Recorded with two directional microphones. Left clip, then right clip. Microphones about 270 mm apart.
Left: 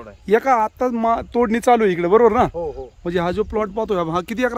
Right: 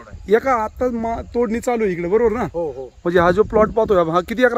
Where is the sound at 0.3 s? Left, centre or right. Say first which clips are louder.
Left 1 dB; centre.